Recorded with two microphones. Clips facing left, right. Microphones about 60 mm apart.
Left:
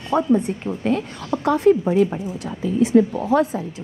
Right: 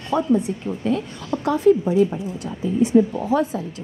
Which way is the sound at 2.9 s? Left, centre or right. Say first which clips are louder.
Left 2 dB; left.